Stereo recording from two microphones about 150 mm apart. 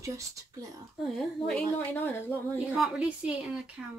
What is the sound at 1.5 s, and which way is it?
Speech, 10° left (ahead or behind).